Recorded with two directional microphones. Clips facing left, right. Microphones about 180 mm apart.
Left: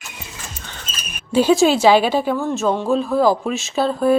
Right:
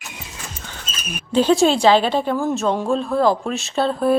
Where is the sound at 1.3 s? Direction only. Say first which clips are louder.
Left 1 dB; 5° left (ahead or behind).